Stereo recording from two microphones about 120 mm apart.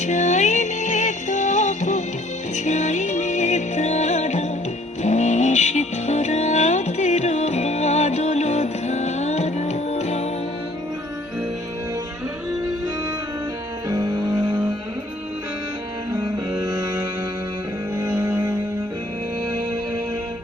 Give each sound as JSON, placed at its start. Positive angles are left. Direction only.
{"t": 0.0, "sound": "music", "side_deg": 80}
{"t": 13.8, "sound": "music", "side_deg": -30}
{"t": 17.9, "sound": "music", "side_deg": -20}